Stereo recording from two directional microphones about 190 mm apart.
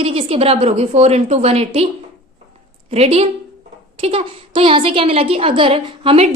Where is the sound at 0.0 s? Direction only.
30° right (ahead or behind).